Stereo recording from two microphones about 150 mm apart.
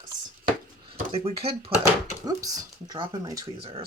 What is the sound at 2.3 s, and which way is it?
Speech, 25° right (ahead or behind).